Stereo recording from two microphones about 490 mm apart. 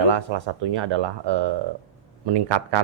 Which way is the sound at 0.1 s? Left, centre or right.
Right.